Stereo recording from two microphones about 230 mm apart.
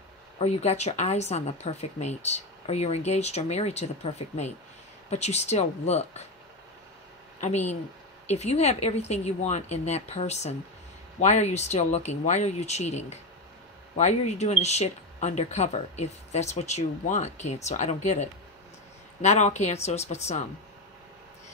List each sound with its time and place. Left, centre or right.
0.4 s speech: left
7.3 s speech: left